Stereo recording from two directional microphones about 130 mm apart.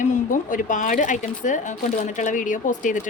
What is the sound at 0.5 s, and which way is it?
Speech, 80° left.